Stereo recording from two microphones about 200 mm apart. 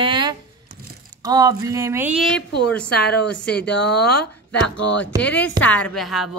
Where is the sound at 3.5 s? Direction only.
55° left (ahead or behind).